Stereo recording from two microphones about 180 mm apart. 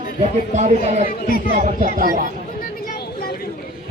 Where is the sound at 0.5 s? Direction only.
40° right (ahead or behind).